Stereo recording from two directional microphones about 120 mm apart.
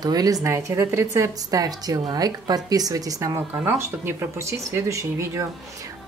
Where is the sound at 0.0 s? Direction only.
30° right (ahead or behind).